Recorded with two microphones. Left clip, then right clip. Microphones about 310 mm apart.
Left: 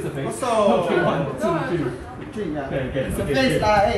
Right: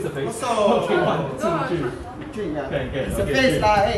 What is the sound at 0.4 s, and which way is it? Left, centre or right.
A man's voice, centre.